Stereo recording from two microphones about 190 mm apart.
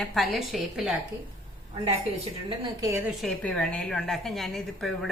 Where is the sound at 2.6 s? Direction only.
20° right (ahead or behind).